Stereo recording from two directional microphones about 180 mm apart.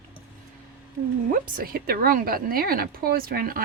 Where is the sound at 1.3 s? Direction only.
50° right (ahead or behind).